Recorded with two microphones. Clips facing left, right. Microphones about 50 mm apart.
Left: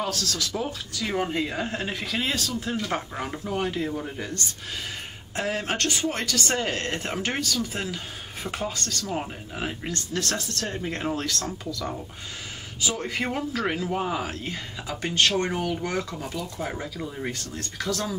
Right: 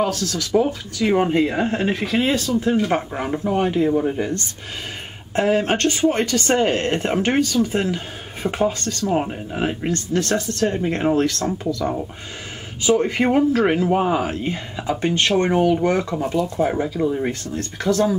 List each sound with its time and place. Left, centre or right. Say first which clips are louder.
0.0 s speech: right 7 dB; right
5.3 s speech: right 10 dB; right